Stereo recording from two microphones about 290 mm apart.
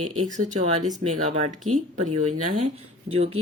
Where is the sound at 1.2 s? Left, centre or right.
Right.